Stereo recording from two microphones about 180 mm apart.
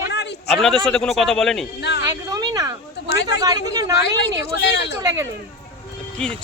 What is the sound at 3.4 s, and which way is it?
Speech, 20° right (ahead or behind).